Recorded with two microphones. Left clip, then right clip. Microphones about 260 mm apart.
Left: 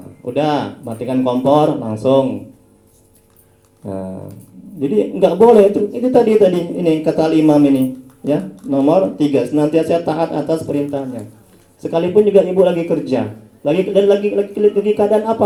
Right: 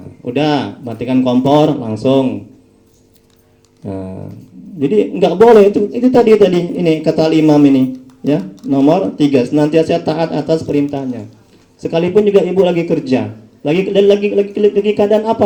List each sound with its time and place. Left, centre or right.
0.3 s a man's voice: right
4.8 s a man's voice: right